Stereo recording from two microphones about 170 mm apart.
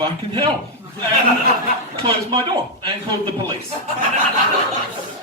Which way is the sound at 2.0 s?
30° right (ahead or behind).